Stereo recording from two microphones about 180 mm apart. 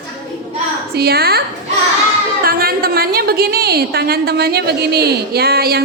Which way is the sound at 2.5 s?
55° right (ahead or behind).